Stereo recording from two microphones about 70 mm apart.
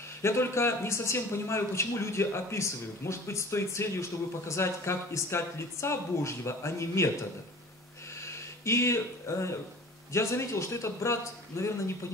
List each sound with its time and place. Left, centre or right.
0.2 s a man's voice: left
8.2 s a man's voice: left